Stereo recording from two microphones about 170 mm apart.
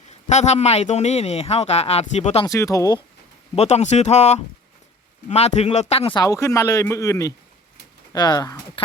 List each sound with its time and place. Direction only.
0.1 s speech: 40° left (ahead or behind)
2.5 s speech: 20° left (ahead or behind)
3.5 s speech: 40° left (ahead or behind)
6.1 s speech: 20° left (ahead or behind)